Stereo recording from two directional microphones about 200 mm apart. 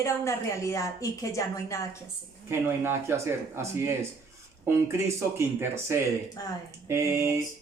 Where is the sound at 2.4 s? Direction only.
10° right (ahead or behind).